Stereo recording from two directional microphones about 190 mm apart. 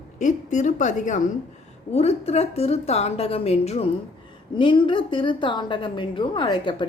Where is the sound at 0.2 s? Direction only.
40° left (ahead or behind).